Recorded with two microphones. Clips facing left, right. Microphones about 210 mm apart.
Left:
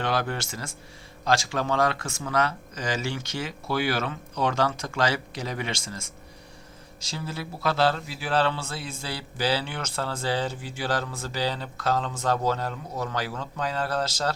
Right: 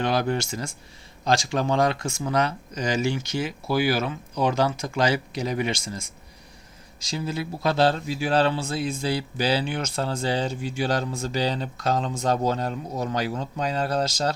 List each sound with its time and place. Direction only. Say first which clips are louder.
0.0 s a man's voice: right 4 dB; 15° right (ahead or behind)
7.1 s a man's voice: right 5 dB; 15° right (ahead or behind)